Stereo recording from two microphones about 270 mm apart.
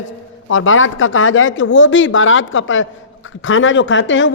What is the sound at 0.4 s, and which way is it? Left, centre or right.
A man's voice, left.